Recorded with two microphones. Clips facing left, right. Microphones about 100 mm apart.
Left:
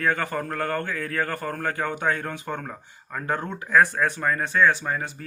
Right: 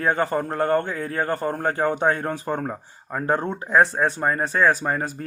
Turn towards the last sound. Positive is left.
turn(degrees=-40)  # may be behind; listen again after turning